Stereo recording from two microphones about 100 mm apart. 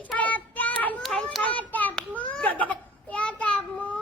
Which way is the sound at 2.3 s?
15° left (ahead or behind).